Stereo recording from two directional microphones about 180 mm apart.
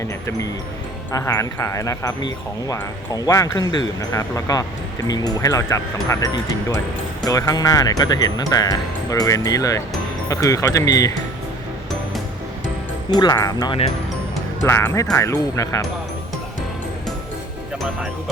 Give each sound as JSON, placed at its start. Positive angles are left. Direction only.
{"t": 1.1, "sound": "speech", "side_deg": 20}
{"t": 13.1, "sound": "speech", "side_deg": 20}